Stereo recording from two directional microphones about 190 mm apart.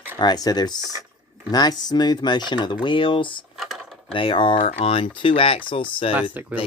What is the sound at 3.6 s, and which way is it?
Cutlery, centre (ahead or behind).